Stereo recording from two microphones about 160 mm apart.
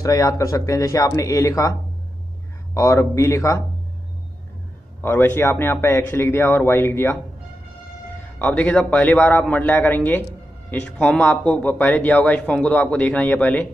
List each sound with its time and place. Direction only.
0.0 s speech: 20° left (ahead or behind)
5.0 s a man's voice: 15° left (ahead or behind)
8.4 s a man's voice: 5° left (ahead or behind)